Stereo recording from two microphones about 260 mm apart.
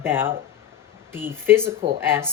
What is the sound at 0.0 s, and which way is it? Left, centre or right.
Speech, centre.